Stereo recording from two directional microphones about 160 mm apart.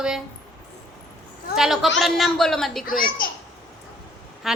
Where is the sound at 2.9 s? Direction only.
60° left (ahead or behind).